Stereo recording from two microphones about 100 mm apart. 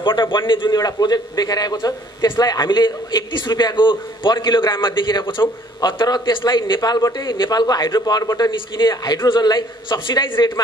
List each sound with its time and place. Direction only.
0.0 s a man's voice: 55° left (ahead or behind)